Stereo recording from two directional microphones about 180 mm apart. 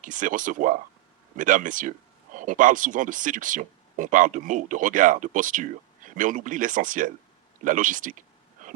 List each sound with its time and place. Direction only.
0.0 s speech: 45° right (ahead or behind)